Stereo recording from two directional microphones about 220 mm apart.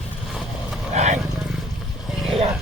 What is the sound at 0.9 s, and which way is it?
Wild animals, 30° right (ahead or behind).